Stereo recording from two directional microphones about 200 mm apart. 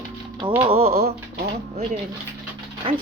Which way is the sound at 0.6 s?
30° right (ahead or behind).